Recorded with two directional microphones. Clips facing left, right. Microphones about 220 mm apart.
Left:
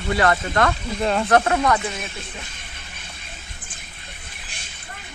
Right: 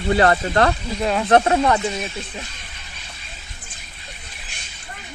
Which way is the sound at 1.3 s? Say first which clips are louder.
Right 4 dB; 25° right (ahead or behind).